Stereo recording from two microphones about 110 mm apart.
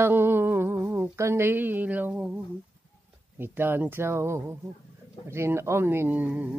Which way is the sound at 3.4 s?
20° right (ahead or behind).